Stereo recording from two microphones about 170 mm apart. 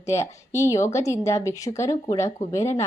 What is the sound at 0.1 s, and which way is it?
A woman's voice, 15° left (ahead or behind).